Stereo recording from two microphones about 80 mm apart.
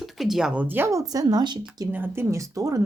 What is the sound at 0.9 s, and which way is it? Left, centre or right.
Speech, right.